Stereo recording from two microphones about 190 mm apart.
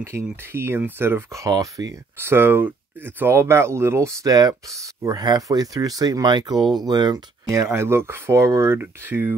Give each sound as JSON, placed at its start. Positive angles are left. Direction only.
{"t": 0.0, "sound": "speech", "side_deg": -15}